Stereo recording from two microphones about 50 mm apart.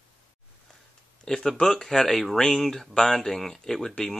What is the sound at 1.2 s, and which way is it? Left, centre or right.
Speech, centre.